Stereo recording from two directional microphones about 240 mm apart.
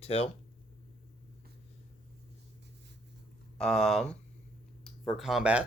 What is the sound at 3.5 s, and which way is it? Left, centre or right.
Speech, centre.